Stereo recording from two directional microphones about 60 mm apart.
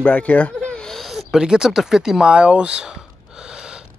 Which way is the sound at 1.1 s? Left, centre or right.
Centre.